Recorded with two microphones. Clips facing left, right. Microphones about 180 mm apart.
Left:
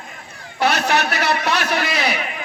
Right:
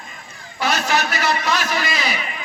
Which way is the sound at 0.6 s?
60° left (ahead or behind).